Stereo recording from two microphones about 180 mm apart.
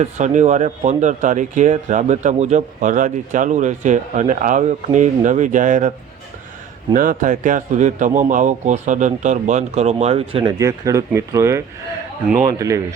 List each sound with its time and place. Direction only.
0.0 s speech: 40° right (ahead or behind)
6.9 s speech: 50° right (ahead or behind); by 10.5 s 30° right (ahead or behind)
10.6 s speech: 15° right (ahead or behind)